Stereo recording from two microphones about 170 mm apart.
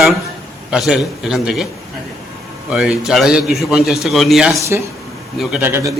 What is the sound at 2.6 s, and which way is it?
A man's voice, 5° right (ahead or behind).